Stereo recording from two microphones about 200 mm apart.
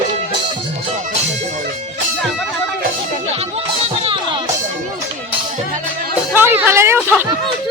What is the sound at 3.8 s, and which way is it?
Music, 30° right (ahead or behind).